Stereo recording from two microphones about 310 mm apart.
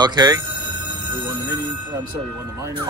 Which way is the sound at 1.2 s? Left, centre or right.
Right.